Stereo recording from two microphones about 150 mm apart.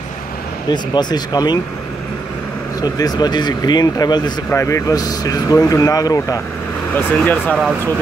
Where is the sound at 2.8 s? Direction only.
25° left (ahead or behind).